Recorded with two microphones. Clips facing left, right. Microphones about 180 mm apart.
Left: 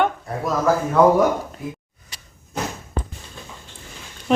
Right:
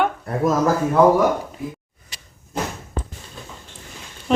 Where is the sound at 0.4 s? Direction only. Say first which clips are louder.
Right 4 dB; 45° right (ahead or behind).